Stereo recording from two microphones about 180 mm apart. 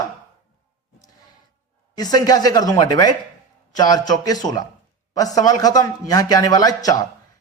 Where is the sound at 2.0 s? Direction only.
20° left (ahead or behind).